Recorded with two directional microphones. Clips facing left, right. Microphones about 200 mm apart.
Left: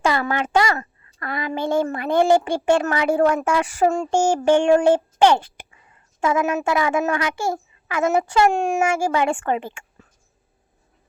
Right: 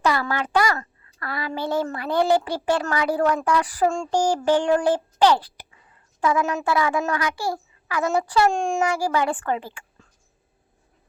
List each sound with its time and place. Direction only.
0.1 s a child's voice: 20° left (ahead or behind)
6.1 s a child's voice: 20° left (ahead or behind)